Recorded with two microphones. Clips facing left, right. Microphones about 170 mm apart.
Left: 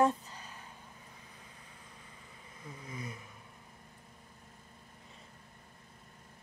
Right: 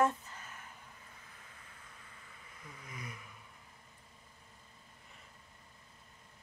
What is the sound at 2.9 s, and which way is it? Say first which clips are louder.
Vehicle: left 4 dB; 30° left (ahead or behind).